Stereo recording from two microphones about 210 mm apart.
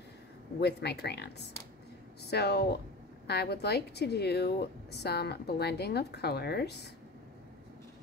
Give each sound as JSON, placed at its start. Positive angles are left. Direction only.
{"t": 0.6, "sound": "a woman's voice", "side_deg": 50}